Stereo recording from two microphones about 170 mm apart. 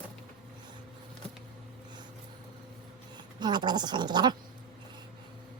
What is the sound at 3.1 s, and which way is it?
Speech, 25° right (ahead or behind).